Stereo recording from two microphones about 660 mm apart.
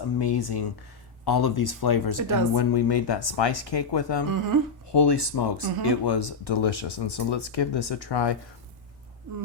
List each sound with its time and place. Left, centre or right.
0.2 s speech: left
4.3 s speech: right
4.9 s speech: left